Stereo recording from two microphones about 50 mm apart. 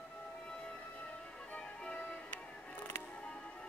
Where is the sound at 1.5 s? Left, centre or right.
Left.